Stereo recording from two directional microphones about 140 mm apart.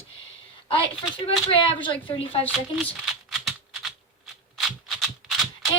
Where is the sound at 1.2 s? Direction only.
40° left (ahead or behind).